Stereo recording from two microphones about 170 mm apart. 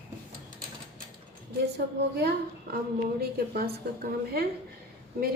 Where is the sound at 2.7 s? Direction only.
65° right (ahead or behind).